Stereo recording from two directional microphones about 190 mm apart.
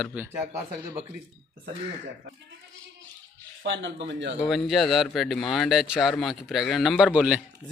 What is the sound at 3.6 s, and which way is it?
Speech, 70° right (ahead or behind).